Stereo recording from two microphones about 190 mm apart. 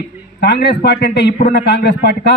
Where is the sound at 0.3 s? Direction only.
60° left (ahead or behind).